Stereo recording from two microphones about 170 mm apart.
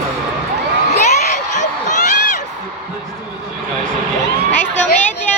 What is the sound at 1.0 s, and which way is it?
Crowd, 45° left (ahead or behind).